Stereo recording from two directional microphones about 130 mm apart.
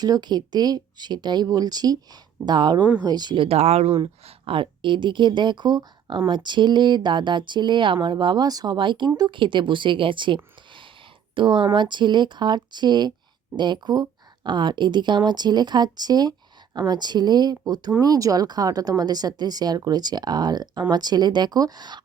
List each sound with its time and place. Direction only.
0.0 s speech: 30° right (ahead or behind)